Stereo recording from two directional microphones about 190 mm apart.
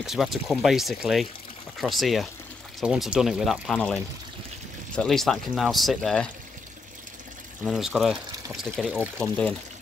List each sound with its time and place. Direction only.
0.0 s speech: centre (ahead or behind)
7.6 s speech: 5° right (ahead or behind)